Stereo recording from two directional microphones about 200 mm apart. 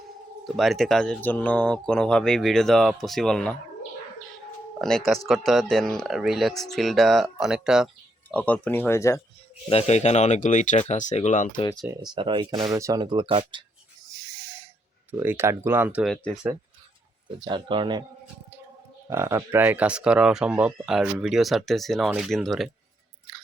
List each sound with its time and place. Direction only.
0.4 s speech: centre (ahead or behind)
4.8 s speech: centre (ahead or behind)
8.3 s speech: 5° left (ahead or behind)
9.6 s speech: 30° left (ahead or behind)
12.1 s speech: 25° right (ahead or behind)
14.1 s a sound: 15° right (ahead or behind)
15.1 s speech: 10° right (ahead or behind)
17.4 s speech: 25° right (ahead or behind)
19.1 s speech: 15° right (ahead or behind)